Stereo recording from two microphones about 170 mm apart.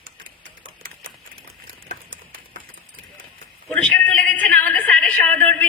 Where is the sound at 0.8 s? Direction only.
55° right (ahead or behind).